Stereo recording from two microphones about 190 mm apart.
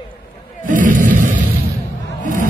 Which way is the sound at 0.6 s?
45° right (ahead or behind).